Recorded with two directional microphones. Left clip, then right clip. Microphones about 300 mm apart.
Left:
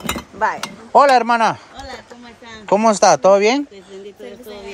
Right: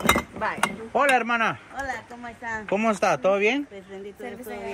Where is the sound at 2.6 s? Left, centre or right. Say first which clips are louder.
Left 11 dB; left.